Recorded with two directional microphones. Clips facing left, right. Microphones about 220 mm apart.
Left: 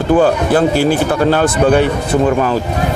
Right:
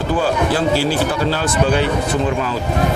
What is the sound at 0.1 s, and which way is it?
Speech, 50° left (ahead or behind).